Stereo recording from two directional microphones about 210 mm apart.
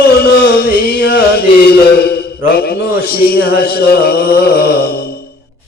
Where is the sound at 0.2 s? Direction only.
50° left (ahead or behind).